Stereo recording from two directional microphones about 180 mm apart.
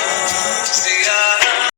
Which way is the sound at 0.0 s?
75° left (ahead or behind).